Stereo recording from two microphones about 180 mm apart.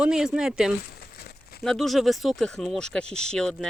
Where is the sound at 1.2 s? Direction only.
60° left (ahead or behind).